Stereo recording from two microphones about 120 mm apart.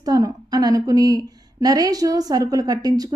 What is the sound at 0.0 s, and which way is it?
A woman's voice, 30° right (ahead or behind).